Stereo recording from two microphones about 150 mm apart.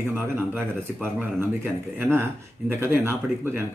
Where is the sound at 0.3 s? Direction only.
20° right (ahead or behind).